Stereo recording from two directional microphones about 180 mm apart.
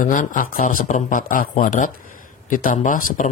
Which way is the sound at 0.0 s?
45° left (ahead or behind).